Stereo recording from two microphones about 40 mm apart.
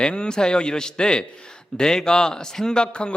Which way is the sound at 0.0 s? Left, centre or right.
Left.